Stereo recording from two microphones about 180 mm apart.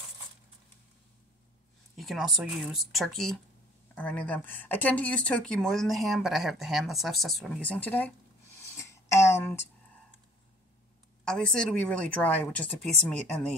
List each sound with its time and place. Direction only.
2.0 s speech: centre (ahead or behind)
8.5 s a sound: 15° left (ahead or behind)
11.2 s speech: 5° left (ahead or behind)